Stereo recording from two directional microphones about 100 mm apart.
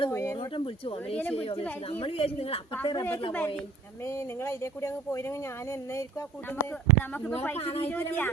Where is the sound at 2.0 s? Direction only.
75° left (ahead or behind).